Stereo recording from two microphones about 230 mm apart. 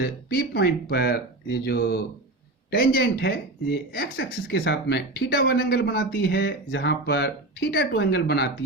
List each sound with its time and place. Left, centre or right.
0.0 s speech: left